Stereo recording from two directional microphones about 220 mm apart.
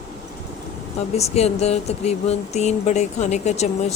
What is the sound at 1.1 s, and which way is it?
Speech, 30° left (ahead or behind).